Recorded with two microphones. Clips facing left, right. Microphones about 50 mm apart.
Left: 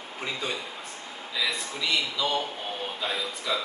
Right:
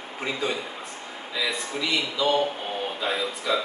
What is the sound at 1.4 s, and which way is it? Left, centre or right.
A man's voice, centre.